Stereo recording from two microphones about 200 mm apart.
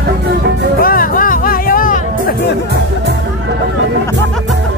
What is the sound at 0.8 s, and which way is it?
Music, 45° left (ahead or behind).